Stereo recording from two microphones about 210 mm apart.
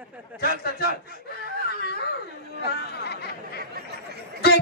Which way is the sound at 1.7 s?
50° left (ahead or behind).